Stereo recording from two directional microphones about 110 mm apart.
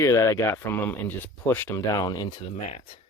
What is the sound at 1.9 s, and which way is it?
Speech, 35° left (ahead or behind).